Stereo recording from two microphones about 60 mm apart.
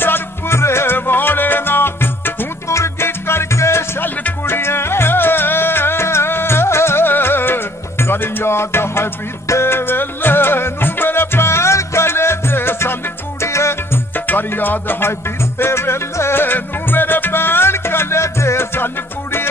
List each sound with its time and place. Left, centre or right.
0.0 s music: left
4.0 s music: left
14.1 s music: left